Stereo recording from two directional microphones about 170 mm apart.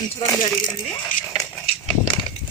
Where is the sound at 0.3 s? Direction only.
20° left (ahead or behind).